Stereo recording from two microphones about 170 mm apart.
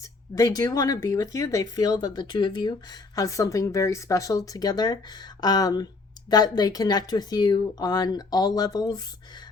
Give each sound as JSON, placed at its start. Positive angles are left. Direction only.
{"t": 0.3, "sound": "speech", "side_deg": 20}